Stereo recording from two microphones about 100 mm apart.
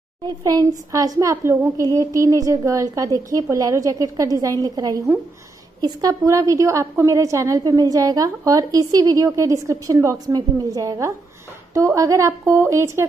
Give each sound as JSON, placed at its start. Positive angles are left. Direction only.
{"t": 0.4, "sound": "a woman's voice", "side_deg": -40}
{"t": 1.3, "sound": "a woman's voice", "side_deg": -25}